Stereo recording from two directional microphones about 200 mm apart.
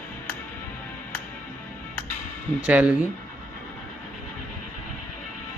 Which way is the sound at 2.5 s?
5° right (ahead or behind).